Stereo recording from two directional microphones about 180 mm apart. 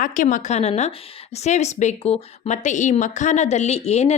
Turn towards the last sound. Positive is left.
turn(degrees=35)  # may be behind; listen again after turning